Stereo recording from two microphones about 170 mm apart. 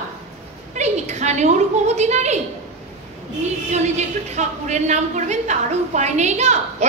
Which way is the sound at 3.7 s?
40° right (ahead or behind).